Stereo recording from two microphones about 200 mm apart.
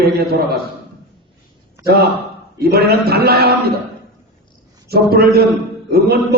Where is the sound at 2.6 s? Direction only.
50° right (ahead or behind).